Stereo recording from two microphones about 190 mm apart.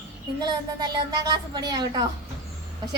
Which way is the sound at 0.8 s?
20° right (ahead or behind).